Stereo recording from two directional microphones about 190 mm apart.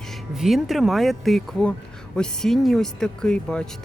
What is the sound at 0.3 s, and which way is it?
Speech, centre (ahead or behind).